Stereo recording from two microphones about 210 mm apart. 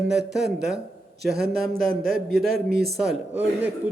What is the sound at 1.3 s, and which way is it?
Speech, 50° right (ahead or behind).